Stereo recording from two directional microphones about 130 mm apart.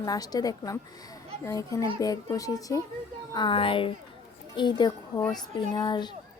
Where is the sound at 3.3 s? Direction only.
40° left (ahead or behind).